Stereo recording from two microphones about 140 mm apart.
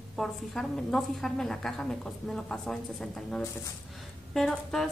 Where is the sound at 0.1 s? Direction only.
Centre (ahead or behind).